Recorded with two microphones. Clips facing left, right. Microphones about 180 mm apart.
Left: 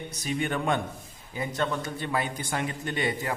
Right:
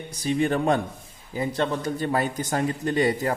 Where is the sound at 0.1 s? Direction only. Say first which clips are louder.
Right 7 dB; 30° right (ahead or behind).